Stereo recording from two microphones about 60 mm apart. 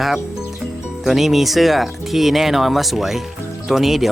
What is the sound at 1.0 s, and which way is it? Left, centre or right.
Speech, centre.